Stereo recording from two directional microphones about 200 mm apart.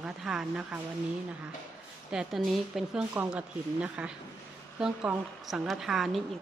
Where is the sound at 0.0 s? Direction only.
5° right (ahead or behind).